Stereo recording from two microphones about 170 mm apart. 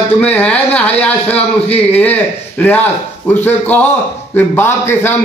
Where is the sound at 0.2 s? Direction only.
5° left (ahead or behind).